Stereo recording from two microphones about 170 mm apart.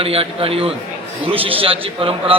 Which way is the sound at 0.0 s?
35° right (ahead or behind).